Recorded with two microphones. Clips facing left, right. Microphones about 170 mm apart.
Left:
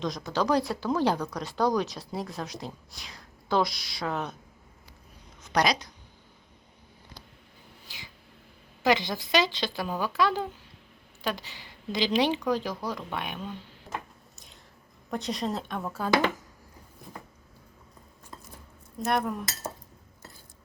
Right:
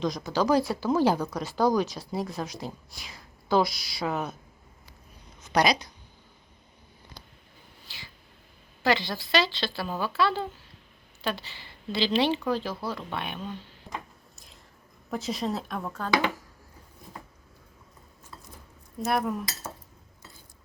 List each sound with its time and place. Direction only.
0.0 s speech: centre (ahead or behind)
5.5 s speech: 5° right (ahead or behind)
8.8 s a woman's voice: 15° left (ahead or behind)
13.1 s a sound: 10° left (ahead or behind)
15.1 s speech: centre (ahead or behind)
19.0 s speech: centre (ahead or behind)